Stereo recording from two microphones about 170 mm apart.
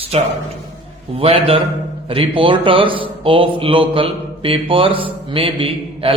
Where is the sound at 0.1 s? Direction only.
40° right (ahead or behind).